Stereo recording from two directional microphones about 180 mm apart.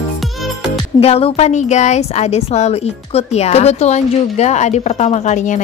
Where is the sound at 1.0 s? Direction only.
35° left (ahead or behind).